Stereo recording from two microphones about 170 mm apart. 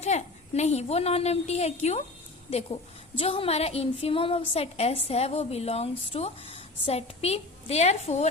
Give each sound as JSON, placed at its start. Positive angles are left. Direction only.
{"t": 0.0, "sound": "a woman's voice", "side_deg": 40}